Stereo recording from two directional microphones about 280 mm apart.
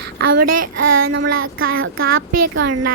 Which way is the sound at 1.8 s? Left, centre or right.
Right.